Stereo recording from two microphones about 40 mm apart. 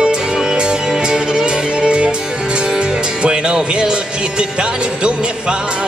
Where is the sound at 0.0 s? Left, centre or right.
Centre.